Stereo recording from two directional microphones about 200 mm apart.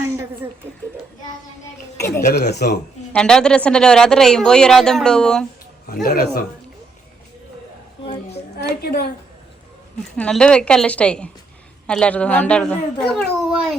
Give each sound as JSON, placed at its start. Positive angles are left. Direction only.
{"t": 2.0, "sound": "speech", "side_deg": 15}
{"t": 2.3, "sound": "speech", "side_deg": 55}
{"t": 3.1, "sound": "speech", "side_deg": 5}
{"t": 5.8, "sound": "a man's voice", "side_deg": 50}
{"t": 8.0, "sound": "child singing", "side_deg": 25}
{"t": 8.5, "sound": "a woman's voice", "side_deg": 55}
{"t": 10.2, "sound": "speech", "side_deg": 5}